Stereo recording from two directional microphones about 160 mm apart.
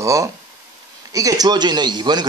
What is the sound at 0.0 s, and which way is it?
A man's voice, 20° right (ahead or behind).